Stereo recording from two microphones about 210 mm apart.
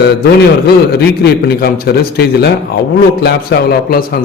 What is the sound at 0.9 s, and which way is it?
A man's voice, 50° left (ahead or behind).